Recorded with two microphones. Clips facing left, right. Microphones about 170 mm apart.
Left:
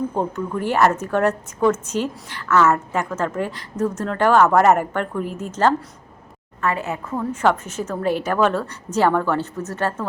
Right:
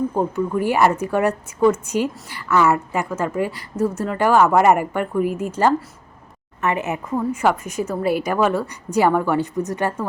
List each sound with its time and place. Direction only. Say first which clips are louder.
0.1 s a woman's voice: right 3 dB; 5° right (ahead or behind)